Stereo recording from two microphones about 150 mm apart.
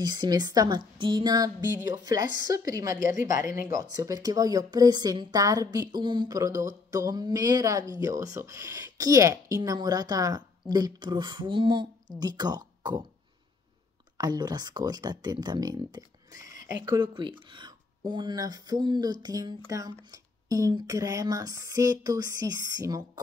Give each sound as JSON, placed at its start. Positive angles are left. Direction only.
{"t": 0.0, "sound": "speech", "side_deg": -30}
{"t": 14.1, "sound": "speech", "side_deg": -25}